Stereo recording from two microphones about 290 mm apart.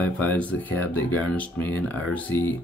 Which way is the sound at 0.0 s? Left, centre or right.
Centre.